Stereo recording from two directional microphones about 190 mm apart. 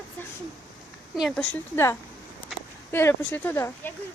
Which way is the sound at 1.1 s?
Centre (ahead or behind).